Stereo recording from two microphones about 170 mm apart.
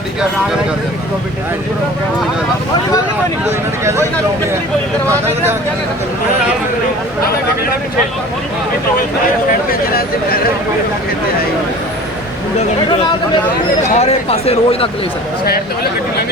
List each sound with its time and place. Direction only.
13.8 s speech: 40° left (ahead or behind)